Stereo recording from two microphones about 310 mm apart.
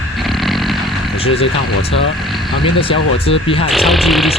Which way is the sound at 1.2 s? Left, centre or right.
Centre.